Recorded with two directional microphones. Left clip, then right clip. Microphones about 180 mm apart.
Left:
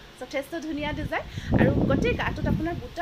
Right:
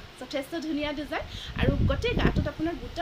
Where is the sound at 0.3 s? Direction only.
15° right (ahead or behind).